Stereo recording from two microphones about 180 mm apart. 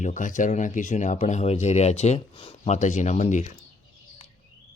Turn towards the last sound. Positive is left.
turn(degrees=40)  # may be behind; listen again after turning